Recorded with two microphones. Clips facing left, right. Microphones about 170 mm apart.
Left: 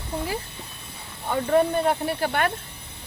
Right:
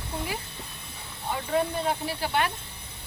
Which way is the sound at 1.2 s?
55° left (ahead or behind).